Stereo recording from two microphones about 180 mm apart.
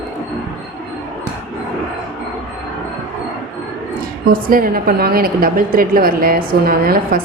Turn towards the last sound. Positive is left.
turn(degrees=-55)  # may be behind; listen again after turning